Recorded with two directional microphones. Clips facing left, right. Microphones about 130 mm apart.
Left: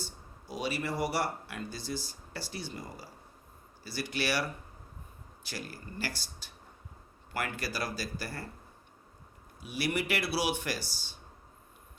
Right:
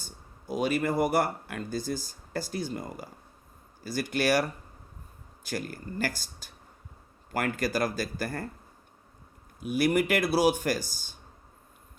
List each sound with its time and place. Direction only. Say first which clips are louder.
0.0 s speech: left 3 dB; 50° right (ahead or behind)
9.6 s speech: right 8 dB; 50° right (ahead or behind)